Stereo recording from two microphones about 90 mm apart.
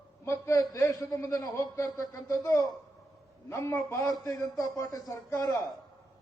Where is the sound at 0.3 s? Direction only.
30° left (ahead or behind).